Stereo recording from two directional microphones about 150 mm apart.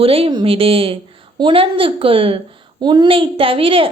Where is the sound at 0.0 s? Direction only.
40° right (ahead or behind).